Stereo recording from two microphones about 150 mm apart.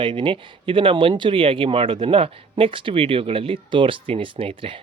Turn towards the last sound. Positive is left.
turn(degrees=-35)  # may be behind; listen again after turning